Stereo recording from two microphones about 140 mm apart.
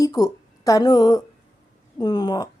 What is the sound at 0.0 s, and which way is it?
A woman's voice, 25° left (ahead or behind).